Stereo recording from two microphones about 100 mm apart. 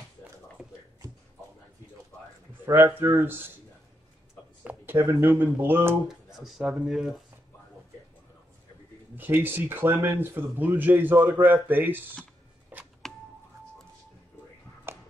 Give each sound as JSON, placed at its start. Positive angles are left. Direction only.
{"t": 2.6, "sound": "a man's voice", "side_deg": -25}
{"t": 4.7, "sound": "a sound", "side_deg": -15}
{"t": 5.2, "sound": "a man's voice", "side_deg": -20}
{"t": 6.0, "sound": "speech", "side_deg": -5}
{"t": 9.1, "sound": "a man's voice", "side_deg": -20}
{"t": 12.7, "sound": "telephone dialing", "side_deg": -20}
{"t": 14.9, "sound": "a sound", "side_deg": -25}